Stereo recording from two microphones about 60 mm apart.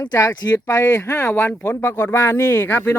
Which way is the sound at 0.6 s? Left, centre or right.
Left.